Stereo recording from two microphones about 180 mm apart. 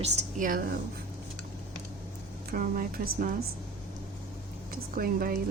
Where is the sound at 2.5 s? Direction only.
50° right (ahead or behind).